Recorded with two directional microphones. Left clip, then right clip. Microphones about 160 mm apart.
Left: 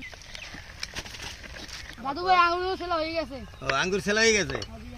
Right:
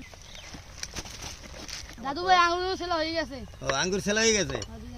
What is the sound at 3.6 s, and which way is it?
Speech, 75° right (ahead or behind).